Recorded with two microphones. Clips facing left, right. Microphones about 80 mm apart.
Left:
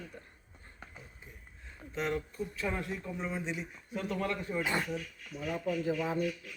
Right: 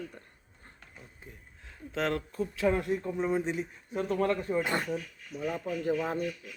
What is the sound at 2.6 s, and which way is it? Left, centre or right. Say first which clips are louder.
Speech: right 10 dB; right.